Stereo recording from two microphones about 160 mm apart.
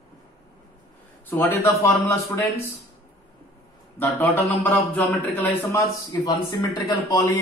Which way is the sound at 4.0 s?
10° left (ahead or behind).